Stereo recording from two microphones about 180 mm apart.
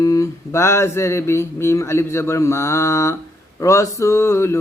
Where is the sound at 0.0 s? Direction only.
15° left (ahead or behind).